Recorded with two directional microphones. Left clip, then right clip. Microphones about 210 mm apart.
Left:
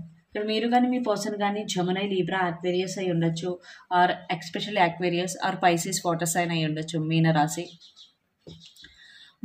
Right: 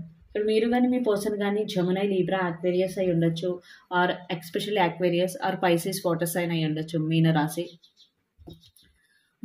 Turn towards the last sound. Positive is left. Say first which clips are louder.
# left 2 dB
turn(degrees=15)  # may be behind; listen again after turning